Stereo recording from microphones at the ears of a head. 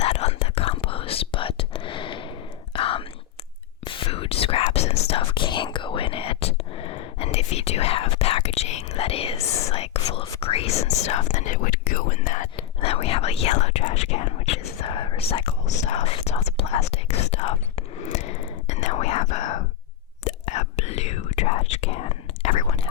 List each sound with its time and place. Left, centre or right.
0.0 s whispering: left